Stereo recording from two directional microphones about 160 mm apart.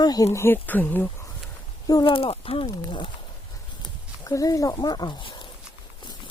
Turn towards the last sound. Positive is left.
turn(degrees=30)  # may be behind; listen again after turning